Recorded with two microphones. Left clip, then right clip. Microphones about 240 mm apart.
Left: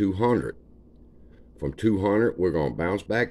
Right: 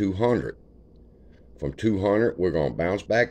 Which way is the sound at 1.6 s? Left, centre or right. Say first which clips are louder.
Even; centre.